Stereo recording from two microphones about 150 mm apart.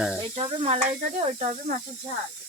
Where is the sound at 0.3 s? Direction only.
40° right (ahead or behind).